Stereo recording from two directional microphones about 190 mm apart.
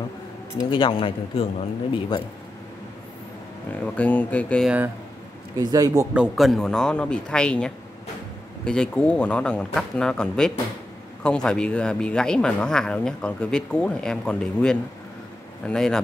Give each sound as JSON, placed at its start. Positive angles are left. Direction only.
{"t": 0.6, "sound": "a man's voice", "side_deg": 25}
{"t": 3.8, "sound": "speech", "side_deg": 5}
{"t": 4.6, "sound": "speech", "side_deg": -10}
{"t": 6.1, "sound": "speech", "side_deg": -5}